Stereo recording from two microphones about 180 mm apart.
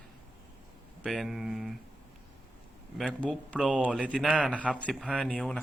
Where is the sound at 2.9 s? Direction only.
5° left (ahead or behind).